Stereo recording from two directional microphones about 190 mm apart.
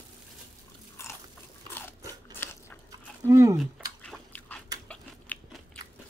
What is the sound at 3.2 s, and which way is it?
Speech, 15° right (ahead or behind).